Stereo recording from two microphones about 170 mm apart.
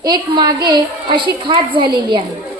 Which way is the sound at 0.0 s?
25° right (ahead or behind).